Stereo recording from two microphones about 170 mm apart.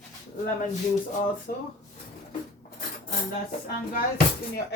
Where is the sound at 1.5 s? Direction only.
55° left (ahead or behind).